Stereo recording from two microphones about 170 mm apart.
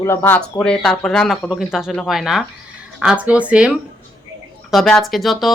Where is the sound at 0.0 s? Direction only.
15° left (ahead or behind).